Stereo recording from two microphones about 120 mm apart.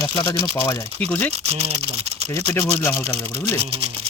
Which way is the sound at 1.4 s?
60° right (ahead or behind).